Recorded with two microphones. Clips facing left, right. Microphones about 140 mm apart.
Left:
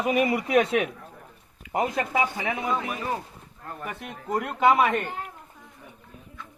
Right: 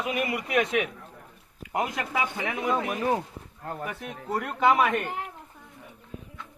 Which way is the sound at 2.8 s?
60° right (ahead or behind).